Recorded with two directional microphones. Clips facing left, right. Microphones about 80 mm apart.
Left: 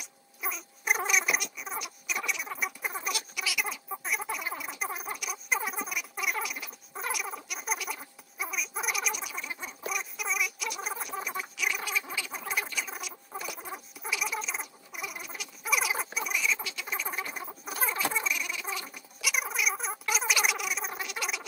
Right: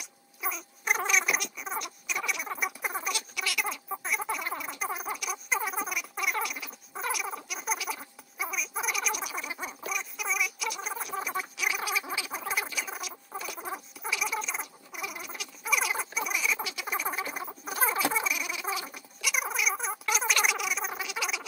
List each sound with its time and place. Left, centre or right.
0.0 s cat: centre
2.2 s frog: right
2.6 s rodents: centre
3.3 s a sound: centre
9.3 s gargling: centre
9.8 s gargling: centre
12.9 s rodents: centre
16.4 s frog: centre
17.1 s rodents: centre
17.9 s cat: centre